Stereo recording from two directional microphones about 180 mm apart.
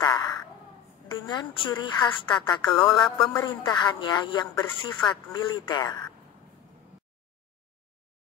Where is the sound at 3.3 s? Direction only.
25° left (ahead or behind).